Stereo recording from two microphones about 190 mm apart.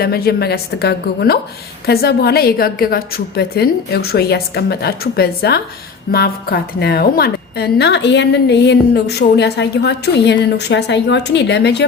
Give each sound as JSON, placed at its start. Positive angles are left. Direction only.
{"t": 0.0, "sound": "a woman's voice", "side_deg": 55}